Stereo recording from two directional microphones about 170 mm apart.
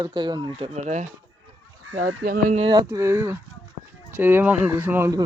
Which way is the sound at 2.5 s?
30° right (ahead or behind).